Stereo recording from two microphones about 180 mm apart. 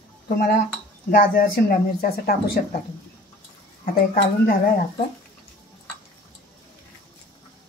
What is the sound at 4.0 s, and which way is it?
Speech, 55° left (ahead or behind).